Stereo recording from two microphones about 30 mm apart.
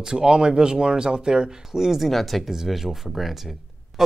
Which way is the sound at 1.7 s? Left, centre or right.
Centre.